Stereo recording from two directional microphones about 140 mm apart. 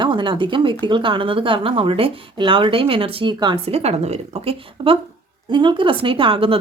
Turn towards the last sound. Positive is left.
turn(degrees=-40)  # may be behind; listen again after turning